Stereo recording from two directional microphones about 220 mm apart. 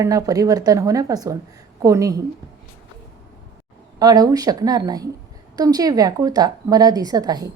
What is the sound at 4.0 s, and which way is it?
A woman's voice, 15° right (ahead or behind).